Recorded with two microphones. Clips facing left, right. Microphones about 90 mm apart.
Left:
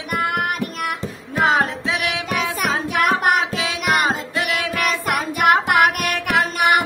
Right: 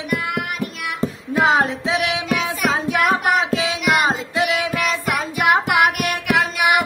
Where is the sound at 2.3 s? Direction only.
50° left (ahead or behind).